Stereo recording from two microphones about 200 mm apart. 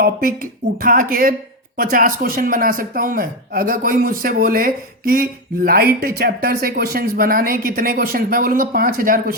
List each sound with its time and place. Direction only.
0.0 s speech: 45° right (ahead or behind)